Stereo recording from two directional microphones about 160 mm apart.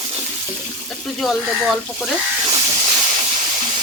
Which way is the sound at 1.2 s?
Centre (ahead or behind).